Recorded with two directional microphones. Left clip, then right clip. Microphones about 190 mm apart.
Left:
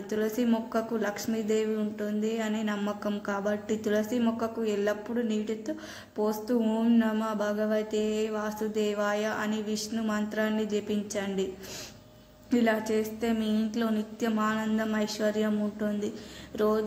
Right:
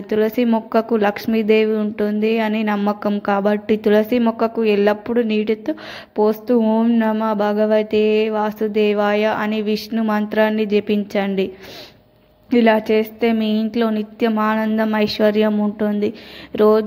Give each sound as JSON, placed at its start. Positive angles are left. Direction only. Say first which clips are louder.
{"t": 0.1, "sound": "speech", "louder": "right 12 dB", "side_deg": -35}
{"t": 12.4, "sound": "speech", "louder": "right 12 dB", "side_deg": -35}